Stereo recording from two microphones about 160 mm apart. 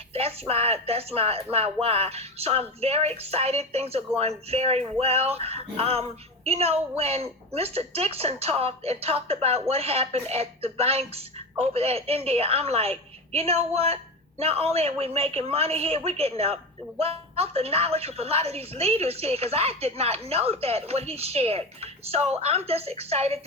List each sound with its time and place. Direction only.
0.1 s music: 40° right (ahead or behind)